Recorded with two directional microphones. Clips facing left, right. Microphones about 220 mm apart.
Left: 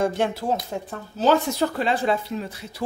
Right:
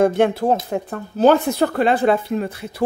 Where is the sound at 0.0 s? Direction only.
55° right (ahead or behind).